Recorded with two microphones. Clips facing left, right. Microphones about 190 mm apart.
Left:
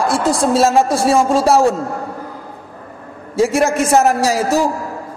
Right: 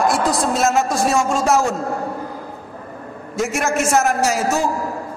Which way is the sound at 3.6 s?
35° left (ahead or behind).